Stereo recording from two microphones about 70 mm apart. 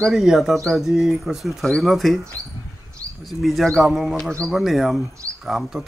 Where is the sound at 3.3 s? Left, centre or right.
Centre.